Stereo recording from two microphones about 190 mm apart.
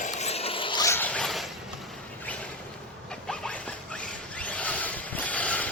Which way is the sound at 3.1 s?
5° left (ahead or behind).